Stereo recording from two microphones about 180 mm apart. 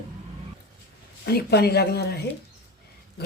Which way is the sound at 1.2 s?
60° left (ahead or behind).